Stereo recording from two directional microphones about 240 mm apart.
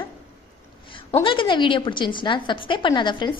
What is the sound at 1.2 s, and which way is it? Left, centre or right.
A woman's voice, left.